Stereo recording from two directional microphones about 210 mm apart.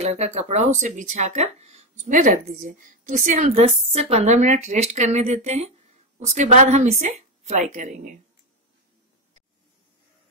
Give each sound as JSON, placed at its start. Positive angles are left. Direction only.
{"t": 0.0, "sound": "speech", "side_deg": -30}